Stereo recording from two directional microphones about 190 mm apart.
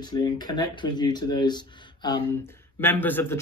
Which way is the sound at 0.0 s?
20° left (ahead or behind).